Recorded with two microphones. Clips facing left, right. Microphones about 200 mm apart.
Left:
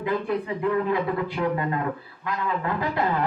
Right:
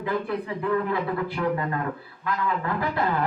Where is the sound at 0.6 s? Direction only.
20° left (ahead or behind).